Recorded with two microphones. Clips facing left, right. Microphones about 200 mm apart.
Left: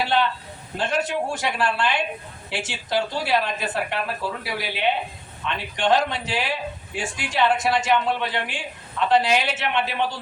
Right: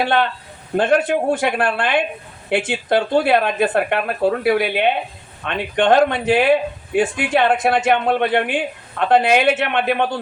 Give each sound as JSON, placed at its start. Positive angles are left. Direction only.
{"t": 0.0, "sound": "a man's voice", "side_deg": -55}